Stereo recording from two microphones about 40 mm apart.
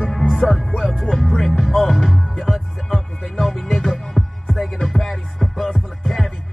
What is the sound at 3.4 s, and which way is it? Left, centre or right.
Music, centre.